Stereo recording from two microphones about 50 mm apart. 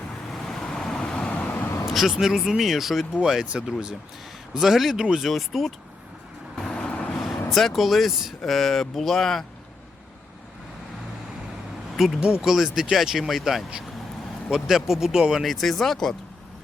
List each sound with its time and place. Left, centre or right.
0.3 s vehicle: centre
1.1 s vehicle: centre
1.9 s speech: centre
4.5 s speech: centre
6.6 s vehicle: centre
7.5 s speech: centre
11.9 s speech: centre